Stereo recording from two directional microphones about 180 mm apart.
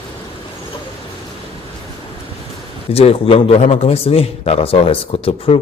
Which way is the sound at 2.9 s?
30° left (ahead or behind).